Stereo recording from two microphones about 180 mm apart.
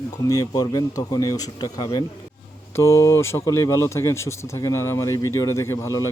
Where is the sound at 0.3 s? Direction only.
20° left (ahead or behind).